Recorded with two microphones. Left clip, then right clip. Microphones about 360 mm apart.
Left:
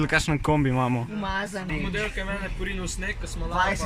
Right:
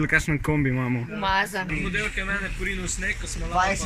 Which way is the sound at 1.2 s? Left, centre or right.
Right.